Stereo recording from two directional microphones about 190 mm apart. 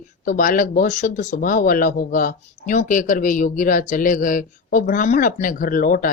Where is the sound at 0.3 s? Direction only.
45° left (ahead or behind).